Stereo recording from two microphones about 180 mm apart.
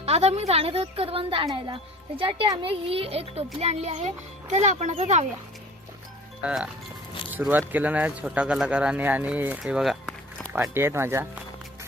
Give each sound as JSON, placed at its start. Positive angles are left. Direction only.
{"t": 0.0, "sound": "speech", "side_deg": -35}
{"t": 6.4, "sound": "speech", "side_deg": -5}
{"t": 10.4, "sound": "speech", "side_deg": -15}